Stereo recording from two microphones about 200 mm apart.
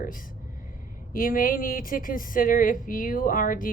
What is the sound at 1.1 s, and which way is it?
Speech, 45° left (ahead or behind).